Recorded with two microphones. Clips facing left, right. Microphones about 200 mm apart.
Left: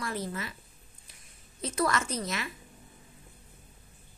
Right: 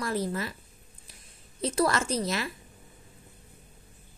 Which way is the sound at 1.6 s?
30° right (ahead or behind).